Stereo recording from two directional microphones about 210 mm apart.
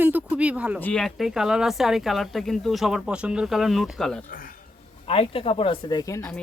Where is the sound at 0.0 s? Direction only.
5° right (ahead or behind).